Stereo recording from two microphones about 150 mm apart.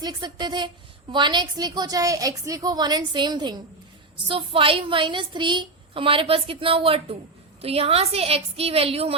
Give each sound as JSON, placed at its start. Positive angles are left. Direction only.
{"t": 0.0, "sound": "a woman's voice", "side_deg": -25}